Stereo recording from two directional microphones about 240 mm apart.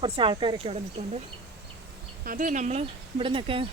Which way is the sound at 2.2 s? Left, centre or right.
Right.